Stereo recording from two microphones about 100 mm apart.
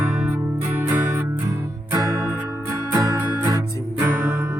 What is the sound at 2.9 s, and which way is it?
Music, 20° right (ahead or behind).